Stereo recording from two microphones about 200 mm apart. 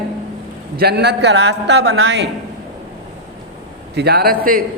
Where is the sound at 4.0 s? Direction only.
55° right (ahead or behind).